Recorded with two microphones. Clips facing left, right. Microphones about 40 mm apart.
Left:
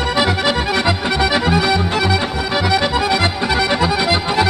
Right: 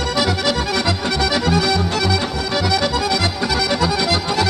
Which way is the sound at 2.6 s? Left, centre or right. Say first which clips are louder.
Left 3 dB; left.